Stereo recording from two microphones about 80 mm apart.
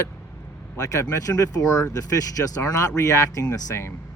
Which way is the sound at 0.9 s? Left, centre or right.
Left.